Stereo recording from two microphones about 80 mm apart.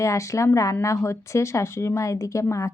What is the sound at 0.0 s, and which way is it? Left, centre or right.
Speech, left.